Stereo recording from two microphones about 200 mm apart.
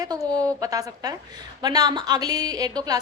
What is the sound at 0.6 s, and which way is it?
A woman's voice, 15° right (ahead or behind).